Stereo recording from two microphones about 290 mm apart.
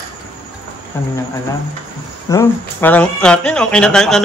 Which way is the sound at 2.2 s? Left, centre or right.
Centre.